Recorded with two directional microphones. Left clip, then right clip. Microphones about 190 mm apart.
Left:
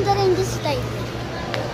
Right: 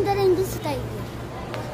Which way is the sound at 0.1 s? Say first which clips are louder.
Left 4 dB; 70° right (ahead or behind).